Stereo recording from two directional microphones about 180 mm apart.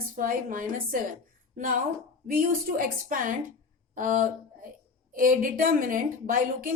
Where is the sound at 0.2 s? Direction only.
50° right (ahead or behind).